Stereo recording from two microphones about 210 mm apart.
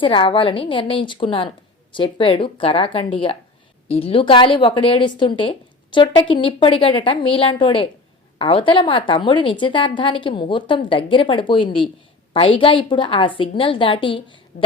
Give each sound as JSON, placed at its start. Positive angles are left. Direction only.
{"t": 0.0, "sound": "a woman's voice", "side_deg": 25}
{"t": 14.5, "sound": "a woman's voice", "side_deg": 40}